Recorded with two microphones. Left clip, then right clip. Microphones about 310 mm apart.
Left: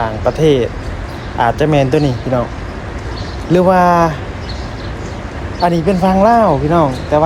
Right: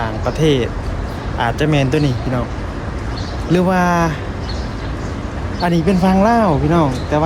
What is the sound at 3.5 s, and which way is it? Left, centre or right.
Speech, centre.